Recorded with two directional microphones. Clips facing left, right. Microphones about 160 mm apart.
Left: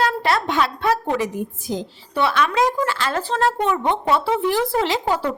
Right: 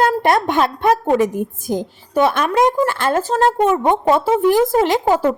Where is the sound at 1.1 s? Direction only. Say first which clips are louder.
Right 6 dB; 50° right (ahead or behind).